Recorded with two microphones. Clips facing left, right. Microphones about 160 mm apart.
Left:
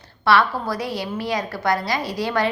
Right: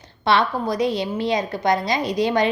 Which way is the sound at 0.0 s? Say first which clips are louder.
Left 1 dB; 20° right (ahead or behind).